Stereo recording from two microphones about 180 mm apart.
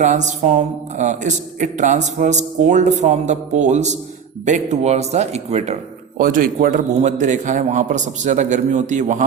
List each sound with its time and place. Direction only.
0.0 s speech: 40° right (ahead or behind)
6.1 s a man's voice: 50° right (ahead or behind)